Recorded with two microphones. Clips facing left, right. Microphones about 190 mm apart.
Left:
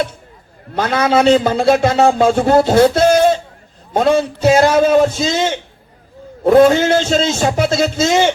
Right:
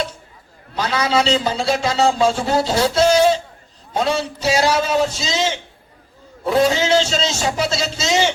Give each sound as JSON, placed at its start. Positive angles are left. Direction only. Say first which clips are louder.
{"t": 0.8, "sound": "a man's voice", "louder": "left 5 dB", "side_deg": 55}